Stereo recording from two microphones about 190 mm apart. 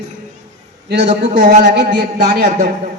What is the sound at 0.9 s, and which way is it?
A woman's voice, 60° right (ahead or behind).